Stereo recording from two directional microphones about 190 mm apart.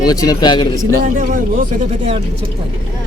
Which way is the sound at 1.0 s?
45° right (ahead or behind).